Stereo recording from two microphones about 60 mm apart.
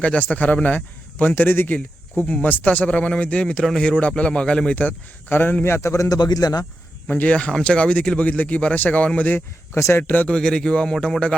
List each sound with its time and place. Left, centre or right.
0.0 s a man's voice: centre
1.7 s speech: centre
4.7 s speech: left
5.3 s a man's voice: left
5.6 s a man's voice: left
7.1 s speech: left
9.7 s speech: left
10.0 s speech: left
10.3 s speech: centre